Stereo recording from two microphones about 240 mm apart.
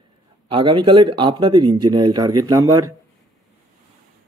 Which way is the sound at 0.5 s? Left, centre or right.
Centre.